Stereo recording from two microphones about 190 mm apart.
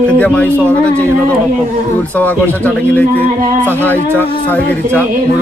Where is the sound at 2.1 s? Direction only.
10° left (ahead or behind).